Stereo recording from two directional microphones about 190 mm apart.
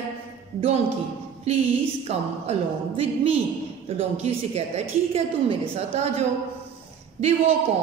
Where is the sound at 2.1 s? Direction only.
30° right (ahead or behind).